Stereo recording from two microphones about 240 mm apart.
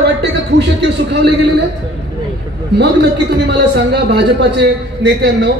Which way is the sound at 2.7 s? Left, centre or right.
Right.